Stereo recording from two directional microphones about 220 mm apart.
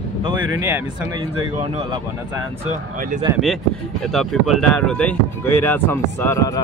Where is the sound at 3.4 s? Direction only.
Centre (ahead or behind).